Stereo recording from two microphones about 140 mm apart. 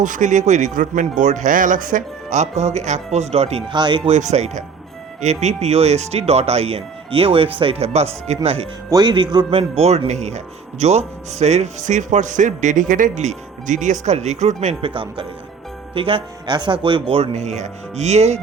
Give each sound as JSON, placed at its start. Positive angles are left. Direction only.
{"t": 0.0, "sound": "a man's voice", "side_deg": -65}
{"t": 3.7, "sound": "speech", "side_deg": -35}
{"t": 4.1, "sound": "a man's voice", "side_deg": -55}
{"t": 8.9, "sound": "a man's voice", "side_deg": -30}
{"t": 14.8, "sound": "speech", "side_deg": -40}